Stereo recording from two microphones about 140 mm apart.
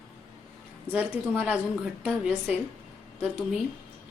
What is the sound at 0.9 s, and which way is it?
A woman's voice, 10° right (ahead or behind).